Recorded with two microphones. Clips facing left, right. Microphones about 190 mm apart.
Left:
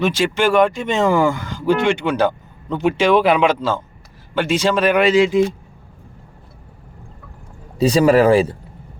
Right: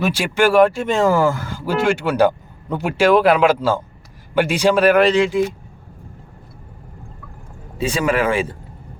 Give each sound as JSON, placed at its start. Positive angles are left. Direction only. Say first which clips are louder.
{"t": 0.0, "sound": "speech", "louder": "even", "side_deg": -10}
{"t": 7.8, "sound": "speech", "louder": "left 6 dB", "side_deg": 35}